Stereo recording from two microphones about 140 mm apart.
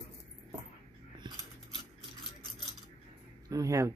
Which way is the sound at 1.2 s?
35° right (ahead or behind).